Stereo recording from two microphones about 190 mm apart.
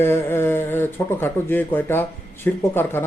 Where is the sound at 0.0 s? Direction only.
10° left (ahead or behind).